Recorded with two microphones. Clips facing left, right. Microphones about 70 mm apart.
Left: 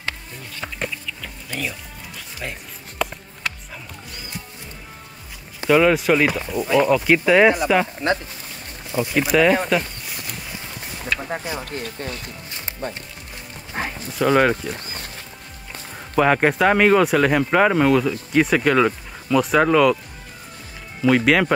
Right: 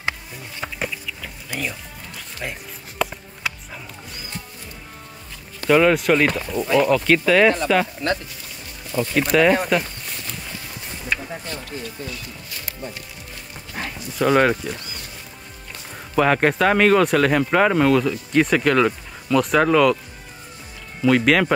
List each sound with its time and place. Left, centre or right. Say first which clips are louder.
0.6 s music: right 1 dB; centre
3.0 s a sound: right 1 dB; centre
5.7 s speech: even; centre
8.9 s speech: even; centre
11.7 s speech: left 2 dB; left
12.4 s speech: left 1 dB; left
13.7 s clip-clop: left 3 dB; left
14.1 s speech: even; centre
16.2 s speech: left 1 dB; centre
21.1 s speech: even; centre